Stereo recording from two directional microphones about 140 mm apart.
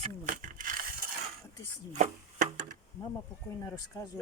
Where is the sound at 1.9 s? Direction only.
65° right (ahead or behind).